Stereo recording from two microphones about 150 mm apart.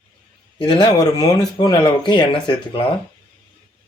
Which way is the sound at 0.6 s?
30° left (ahead or behind).